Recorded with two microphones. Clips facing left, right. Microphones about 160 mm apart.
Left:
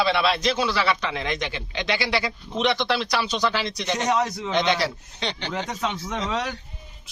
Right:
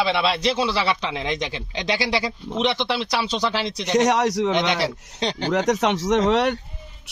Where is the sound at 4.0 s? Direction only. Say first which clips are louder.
Right 7 dB; 75° right (ahead or behind).